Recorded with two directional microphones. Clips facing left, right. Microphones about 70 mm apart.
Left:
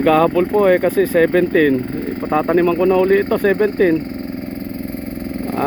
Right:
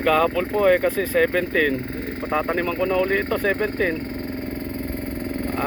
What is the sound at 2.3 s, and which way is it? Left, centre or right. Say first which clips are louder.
Speech: left 8 dB; left.